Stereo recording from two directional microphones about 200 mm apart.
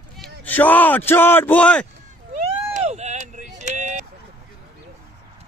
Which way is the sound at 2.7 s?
35° right (ahead or behind).